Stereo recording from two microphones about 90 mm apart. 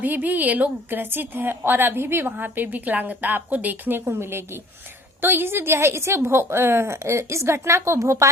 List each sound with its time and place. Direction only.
0.0 s a woman's voice: 20° right (ahead or behind)